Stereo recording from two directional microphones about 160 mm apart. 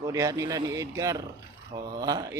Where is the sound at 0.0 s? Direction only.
20° right (ahead or behind).